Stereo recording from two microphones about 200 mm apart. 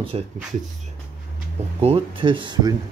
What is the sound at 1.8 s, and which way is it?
Speech, 30° right (ahead or behind).